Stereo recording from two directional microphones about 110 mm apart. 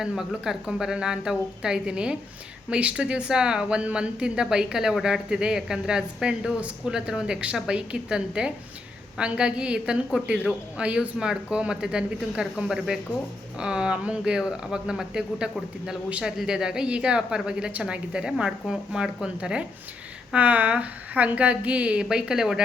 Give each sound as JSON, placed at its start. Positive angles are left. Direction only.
{"t": 0.0, "sound": "speech", "side_deg": -5}